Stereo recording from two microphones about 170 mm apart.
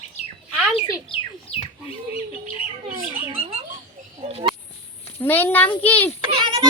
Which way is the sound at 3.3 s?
35° right (ahead or behind).